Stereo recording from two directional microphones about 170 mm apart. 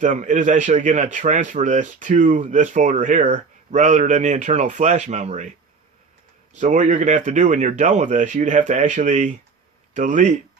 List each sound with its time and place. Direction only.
0.0 s a man's voice: 45° right (ahead or behind)
6.5 s a man's voice: 45° right (ahead or behind)